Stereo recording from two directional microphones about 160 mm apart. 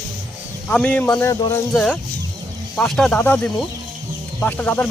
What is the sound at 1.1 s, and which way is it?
Speech, 20° left (ahead or behind).